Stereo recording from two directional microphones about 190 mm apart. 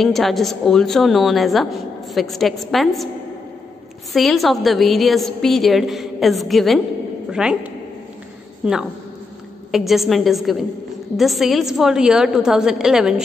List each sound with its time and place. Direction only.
0.0 s a woman's voice: centre (ahead or behind)
4.1 s a woman's voice: centre (ahead or behind)